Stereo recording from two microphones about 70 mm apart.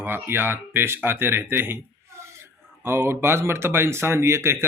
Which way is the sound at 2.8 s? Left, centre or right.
Right.